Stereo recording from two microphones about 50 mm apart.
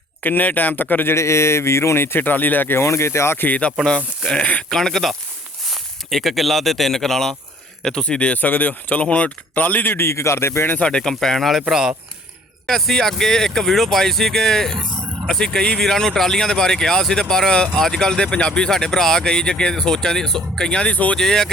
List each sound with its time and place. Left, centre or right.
0.2 s speech: left
1.1 s speech: left
2.7 s speech: left
3.3 s speech: left
4.3 s speech: left
4.7 s speech: centre
8.4 s speech: left
9.9 s speech: left
10.8 s speech: left
11.0 s speech: centre
11.7 s speech: centre
12.6 s speech: centre; by 21.2 s left
21.2 s speech: centre